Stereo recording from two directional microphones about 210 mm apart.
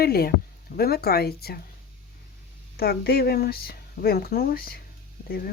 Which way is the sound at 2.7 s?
45° left (ahead or behind).